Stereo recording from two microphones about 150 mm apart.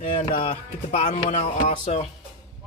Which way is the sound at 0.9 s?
40° left (ahead or behind).